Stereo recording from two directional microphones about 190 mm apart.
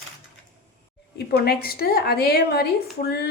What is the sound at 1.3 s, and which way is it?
A woman's voice, 55° left (ahead or behind).